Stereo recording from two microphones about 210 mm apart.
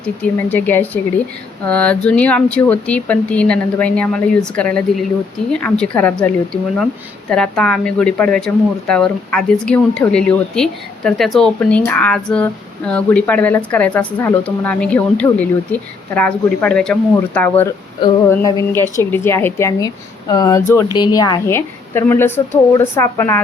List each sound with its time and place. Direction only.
0.0 s speech: 10° left (ahead or behind)